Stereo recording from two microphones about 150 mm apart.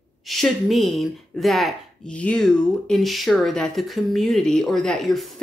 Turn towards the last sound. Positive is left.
turn(degrees=0)  # may be behind; listen again after turning